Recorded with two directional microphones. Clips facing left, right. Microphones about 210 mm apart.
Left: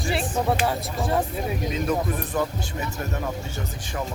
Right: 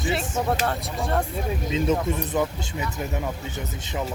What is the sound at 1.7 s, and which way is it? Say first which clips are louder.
Speech: right 4 dB; 25° right (ahead or behind).